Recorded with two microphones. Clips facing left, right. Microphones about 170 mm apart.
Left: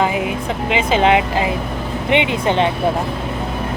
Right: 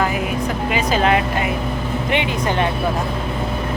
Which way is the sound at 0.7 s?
20° left (ahead or behind).